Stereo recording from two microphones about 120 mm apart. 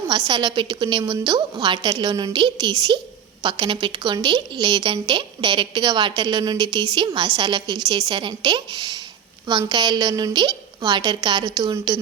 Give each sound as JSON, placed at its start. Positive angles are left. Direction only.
{"t": 0.3, "sound": "a woman's voice", "side_deg": -40}